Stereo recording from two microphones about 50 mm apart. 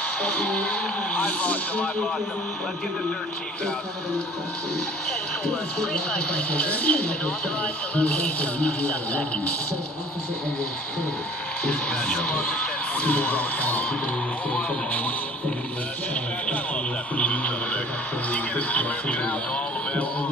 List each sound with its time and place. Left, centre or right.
0.2 s speech: left
5.4 s speech: centre
11.6 s speech: left
16.4 s speech: left